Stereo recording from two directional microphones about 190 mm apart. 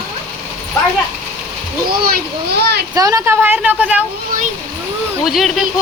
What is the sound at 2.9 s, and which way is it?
A woman's voice, 15° right (ahead or behind).